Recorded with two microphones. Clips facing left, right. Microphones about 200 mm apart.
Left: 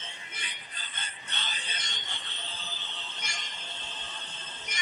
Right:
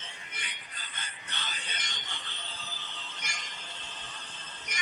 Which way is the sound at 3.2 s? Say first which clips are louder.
Left 1 dB; 25° left (ahead or behind).